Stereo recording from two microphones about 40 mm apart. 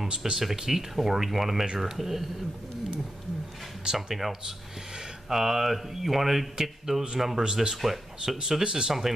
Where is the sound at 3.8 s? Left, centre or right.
Centre.